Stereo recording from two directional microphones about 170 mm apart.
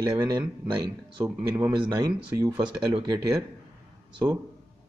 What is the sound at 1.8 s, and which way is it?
Speech, 20° right (ahead or behind).